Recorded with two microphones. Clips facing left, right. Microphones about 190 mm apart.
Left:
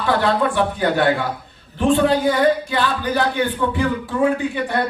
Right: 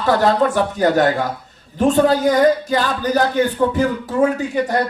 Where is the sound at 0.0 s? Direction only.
40° right (ahead or behind).